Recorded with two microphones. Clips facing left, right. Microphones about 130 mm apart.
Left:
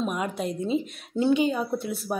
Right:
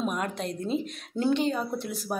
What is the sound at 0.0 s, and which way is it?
A woman's voice, 5° left (ahead or behind).